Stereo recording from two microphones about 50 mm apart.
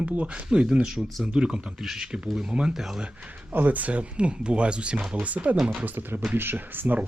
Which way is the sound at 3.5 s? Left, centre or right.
Right.